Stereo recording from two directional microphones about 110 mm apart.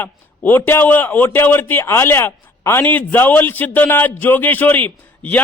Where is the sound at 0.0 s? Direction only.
15° left (ahead or behind).